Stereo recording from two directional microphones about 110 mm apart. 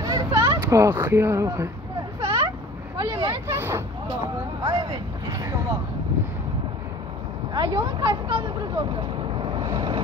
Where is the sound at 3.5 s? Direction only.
25° right (ahead or behind).